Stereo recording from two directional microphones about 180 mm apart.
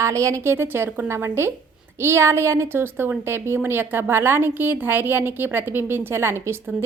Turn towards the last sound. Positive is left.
turn(degrees=-15)  # may be behind; listen again after turning